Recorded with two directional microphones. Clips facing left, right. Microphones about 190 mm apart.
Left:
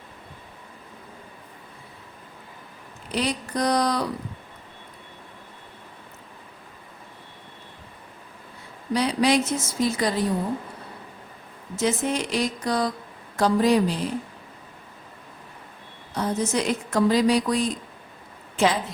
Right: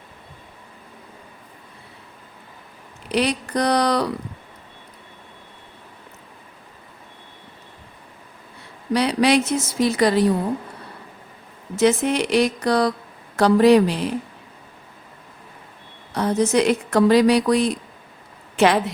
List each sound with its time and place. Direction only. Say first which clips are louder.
3.1 s a woman's voice: right 5 dB; 75° right (ahead or behind)
8.9 s a woman's voice: right 3 dB; 70° right (ahead or behind)
11.8 s a woman's voice: right 6 dB; 70° right (ahead or behind)
16.1 s a woman's voice: right 6 dB; 70° right (ahead or behind)